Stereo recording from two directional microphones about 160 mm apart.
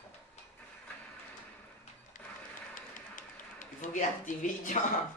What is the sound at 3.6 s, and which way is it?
Speech, 55° left (ahead or behind).